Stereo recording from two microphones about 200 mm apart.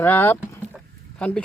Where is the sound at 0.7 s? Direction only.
5° left (ahead or behind).